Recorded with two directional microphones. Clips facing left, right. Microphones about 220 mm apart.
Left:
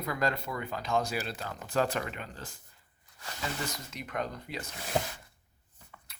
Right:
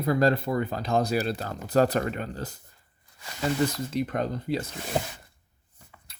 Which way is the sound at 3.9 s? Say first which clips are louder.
Right 9 dB; 35° right (ahead or behind).